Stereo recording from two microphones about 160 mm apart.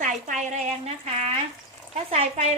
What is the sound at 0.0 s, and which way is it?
A woman's voice, 50° right (ahead or behind).